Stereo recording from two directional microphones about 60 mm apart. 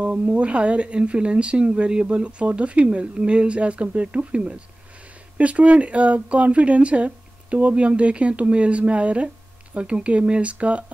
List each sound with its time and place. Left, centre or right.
0.0 s speech: centre